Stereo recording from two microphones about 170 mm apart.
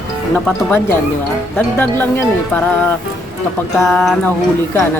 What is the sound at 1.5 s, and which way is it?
Speech, 10° left (ahead or behind).